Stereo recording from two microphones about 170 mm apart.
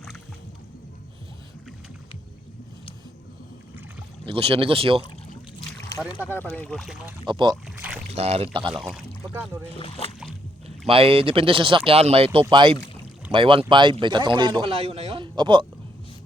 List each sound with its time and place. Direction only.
4.3 s speech: 35° right (ahead or behind)
6.3 s speech: 10° left (ahead or behind)
7.3 s speech: 25° right (ahead or behind)
7.5 s a sound: 10° right (ahead or behind)
8.1 s speech: 35° right (ahead or behind)
8.7 s speech: centre (ahead or behind)
9.7 s speech: 35° left (ahead or behind)
10.7 s speech: 35° right (ahead or behind)